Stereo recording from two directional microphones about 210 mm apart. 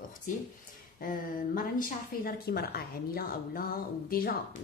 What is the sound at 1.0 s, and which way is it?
Speech, 40° left (ahead or behind).